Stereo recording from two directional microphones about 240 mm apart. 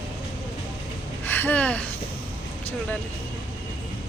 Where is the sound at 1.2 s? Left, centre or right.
Centre.